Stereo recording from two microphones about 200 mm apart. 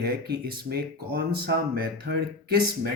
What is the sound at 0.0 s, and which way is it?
Speech, 50° right (ahead or behind).